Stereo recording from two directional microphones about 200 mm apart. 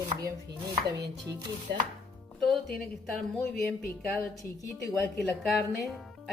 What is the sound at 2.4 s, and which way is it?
Speech, centre (ahead or behind).